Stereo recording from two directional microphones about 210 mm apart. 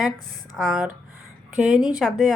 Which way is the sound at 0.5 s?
5° right (ahead or behind).